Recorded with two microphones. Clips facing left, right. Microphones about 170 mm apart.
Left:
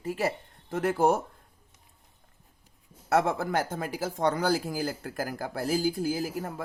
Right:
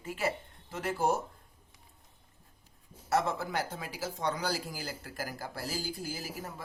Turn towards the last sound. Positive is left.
turn(degrees=50)  # may be behind; listen again after turning